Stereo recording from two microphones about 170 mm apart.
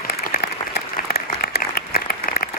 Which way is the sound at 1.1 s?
65° left (ahead or behind).